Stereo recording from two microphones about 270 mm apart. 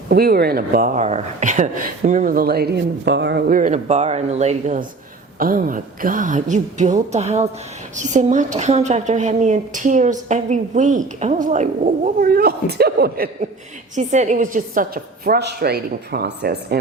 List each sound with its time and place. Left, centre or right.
0.1 s a woman's voice: right